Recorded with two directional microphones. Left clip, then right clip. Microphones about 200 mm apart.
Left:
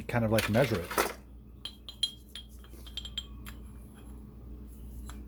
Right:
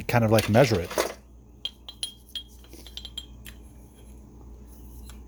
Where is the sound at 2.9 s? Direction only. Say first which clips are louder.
Even; 10° right (ahead or behind).